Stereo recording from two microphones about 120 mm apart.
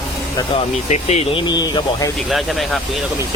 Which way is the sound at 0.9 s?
65° left (ahead or behind).